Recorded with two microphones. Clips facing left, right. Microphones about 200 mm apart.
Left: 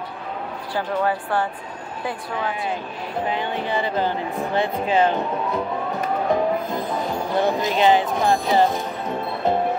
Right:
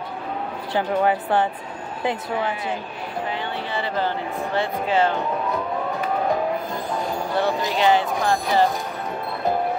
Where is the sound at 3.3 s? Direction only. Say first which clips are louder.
Left 3 dB; 15° left (ahead or behind).